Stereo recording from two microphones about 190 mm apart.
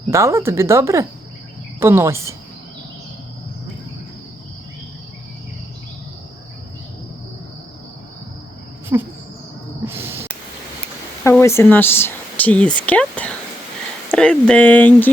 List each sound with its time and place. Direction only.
0.1 s speech: 15° right (ahead or behind)
8.9 s speech: 15° right (ahead or behind)
9.8 s a sound: 10° right (ahead or behind)
11.2 s speech: 15° left (ahead or behind)